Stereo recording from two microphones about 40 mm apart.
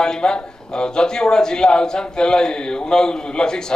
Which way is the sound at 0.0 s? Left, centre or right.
Centre.